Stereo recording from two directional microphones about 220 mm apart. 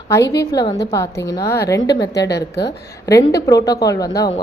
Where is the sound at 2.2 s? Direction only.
50° left (ahead or behind).